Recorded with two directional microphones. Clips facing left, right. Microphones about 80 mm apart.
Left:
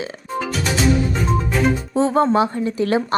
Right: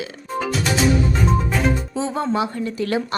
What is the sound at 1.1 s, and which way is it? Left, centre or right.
Music, centre.